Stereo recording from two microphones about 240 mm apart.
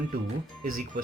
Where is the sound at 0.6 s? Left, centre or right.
Right.